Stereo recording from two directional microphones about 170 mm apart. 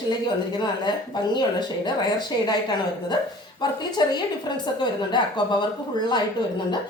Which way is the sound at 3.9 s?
25° left (ahead or behind).